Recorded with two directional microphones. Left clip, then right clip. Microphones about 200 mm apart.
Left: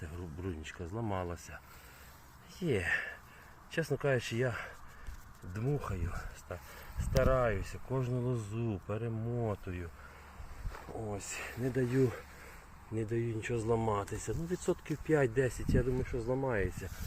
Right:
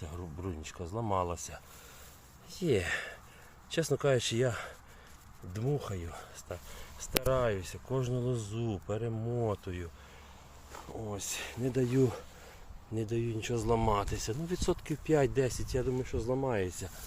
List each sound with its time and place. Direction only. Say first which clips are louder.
0.0 s speech: right 1 dB; 15° right (ahead or behind)
2.6 s speech: right 2 dB; 20° right (ahead or behind)
5.5 s speech: right 2 dB; 10° right (ahead or behind)
10.9 s speech: right 2 dB; centre (ahead or behind)